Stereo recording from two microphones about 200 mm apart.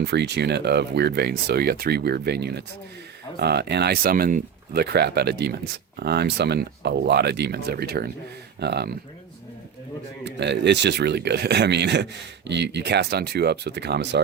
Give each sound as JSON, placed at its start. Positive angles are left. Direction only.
{"t": 0.0, "sound": "speech", "side_deg": -55}
{"t": 10.2, "sound": "speech", "side_deg": -60}